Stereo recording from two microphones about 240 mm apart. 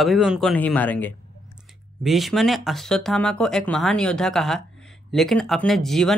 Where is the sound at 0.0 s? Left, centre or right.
Centre.